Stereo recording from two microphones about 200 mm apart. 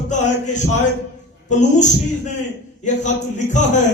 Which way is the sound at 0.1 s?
35° left (ahead or behind).